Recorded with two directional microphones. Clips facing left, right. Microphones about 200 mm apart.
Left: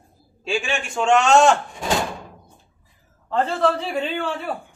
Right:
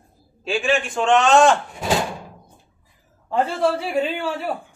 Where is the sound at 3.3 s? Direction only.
10° right (ahead or behind).